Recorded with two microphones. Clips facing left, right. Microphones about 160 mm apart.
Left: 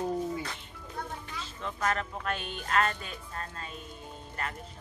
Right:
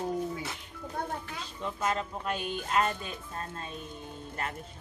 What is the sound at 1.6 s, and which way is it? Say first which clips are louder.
Speech: even; 15° right (ahead or behind).